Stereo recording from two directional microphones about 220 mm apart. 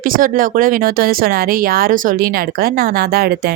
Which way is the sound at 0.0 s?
40° right (ahead or behind).